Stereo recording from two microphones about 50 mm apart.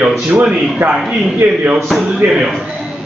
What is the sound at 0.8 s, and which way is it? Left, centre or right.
Speech, right.